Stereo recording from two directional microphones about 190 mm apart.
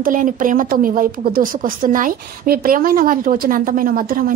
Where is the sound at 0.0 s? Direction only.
45° right (ahead or behind).